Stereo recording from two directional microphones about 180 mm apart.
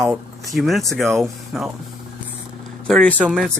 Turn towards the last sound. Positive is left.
turn(degrees=0)  # may be behind; listen again after turning